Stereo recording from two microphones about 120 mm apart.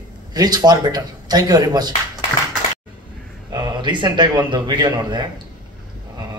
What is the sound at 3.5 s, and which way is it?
A man's voice, 35° right (ahead or behind).